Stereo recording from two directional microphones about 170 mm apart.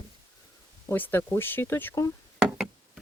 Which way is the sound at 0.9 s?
10° left (ahead or behind).